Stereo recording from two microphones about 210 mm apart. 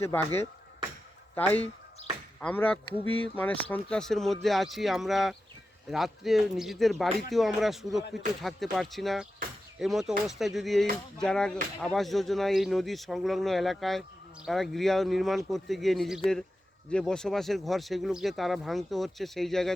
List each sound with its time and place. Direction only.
0.0 s speech: 10° left (ahead or behind)
1.4 s speech: 10° left (ahead or behind)